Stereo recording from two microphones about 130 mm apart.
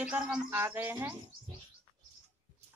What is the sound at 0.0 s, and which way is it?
A woman's voice, 10° right (ahead or behind).